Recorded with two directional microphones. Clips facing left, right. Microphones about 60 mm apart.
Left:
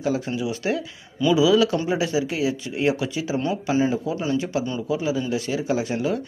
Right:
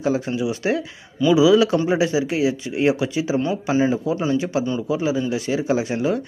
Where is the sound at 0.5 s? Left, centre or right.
Right.